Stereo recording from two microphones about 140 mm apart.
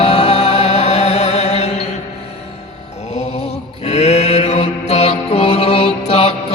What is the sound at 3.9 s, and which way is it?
Mantra, 50° left (ahead or behind).